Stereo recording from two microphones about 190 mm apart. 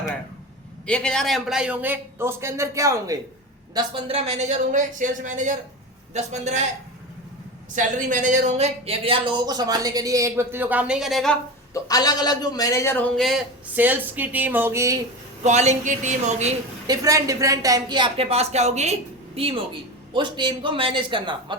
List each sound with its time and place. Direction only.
0.9 s a man's voice: 5° left (ahead or behind); by 3.2 s 15° right (ahead or behind)
3.8 s a woman's voice: 30° right (ahead or behind)
7.8 s speech: 40° right (ahead or behind); by 11.3 s centre (ahead or behind)
11.7 s a man's voice: 20° left (ahead or behind); by 14.9 s 15° right (ahead or behind)
15.4 s a woman's voice: 40° right (ahead or behind)
16.8 s speech: 20° right (ahead or behind)